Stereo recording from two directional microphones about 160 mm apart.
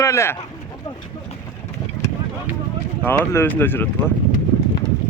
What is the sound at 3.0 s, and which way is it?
Speech, 15° left (ahead or behind).